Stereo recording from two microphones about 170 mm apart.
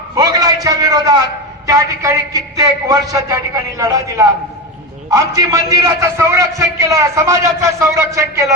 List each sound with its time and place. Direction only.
0.2 s a man's voice: 20° right (ahead or behind)